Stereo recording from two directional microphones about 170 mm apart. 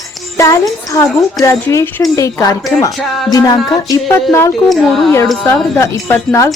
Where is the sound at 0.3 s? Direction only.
15° left (ahead or behind).